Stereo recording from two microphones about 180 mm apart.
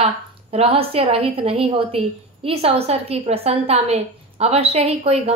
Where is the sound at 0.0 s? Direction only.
35° right (ahead or behind).